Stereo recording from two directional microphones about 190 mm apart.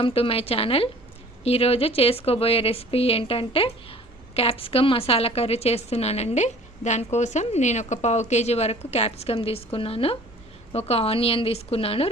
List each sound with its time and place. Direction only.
0.0 s a woman's voice: 30° left (ahead or behind)